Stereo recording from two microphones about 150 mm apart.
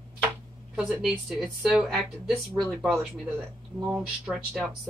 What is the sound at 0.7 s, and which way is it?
Speech, 5° right (ahead or behind).